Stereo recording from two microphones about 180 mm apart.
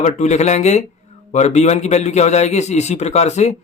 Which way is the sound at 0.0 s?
40° left (ahead or behind).